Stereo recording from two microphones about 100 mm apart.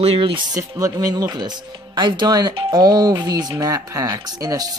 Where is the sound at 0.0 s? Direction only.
70° right (ahead or behind).